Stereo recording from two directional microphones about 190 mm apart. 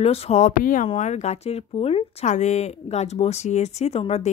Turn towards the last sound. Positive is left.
turn(degrees=35)  # may be behind; listen again after turning